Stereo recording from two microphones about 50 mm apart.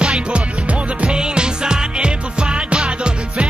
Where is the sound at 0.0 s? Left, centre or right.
Right.